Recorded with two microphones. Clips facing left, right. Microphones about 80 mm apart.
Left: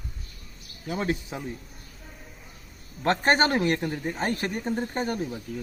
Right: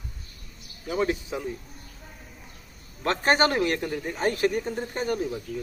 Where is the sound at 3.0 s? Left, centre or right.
Left.